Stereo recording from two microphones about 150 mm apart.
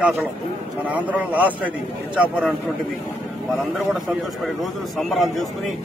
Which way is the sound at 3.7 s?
Centre (ahead or behind).